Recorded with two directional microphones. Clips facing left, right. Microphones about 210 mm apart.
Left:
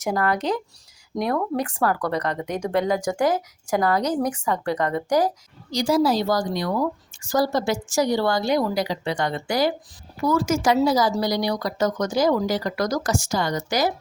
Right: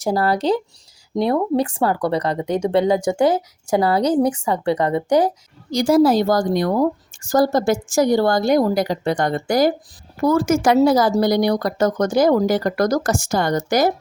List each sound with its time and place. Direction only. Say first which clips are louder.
0.0 s speech: right 4 dB; 35° right (ahead or behind)
5.7 s a woman's voice: right 6 dB; 50° right (ahead or behind)